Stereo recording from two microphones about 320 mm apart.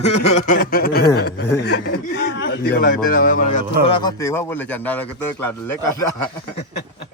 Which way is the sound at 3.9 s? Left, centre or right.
Centre.